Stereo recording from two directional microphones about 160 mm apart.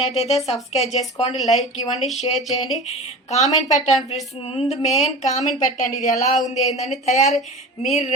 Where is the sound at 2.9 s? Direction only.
45° left (ahead or behind).